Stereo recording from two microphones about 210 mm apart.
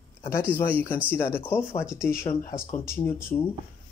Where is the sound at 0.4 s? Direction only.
10° left (ahead or behind).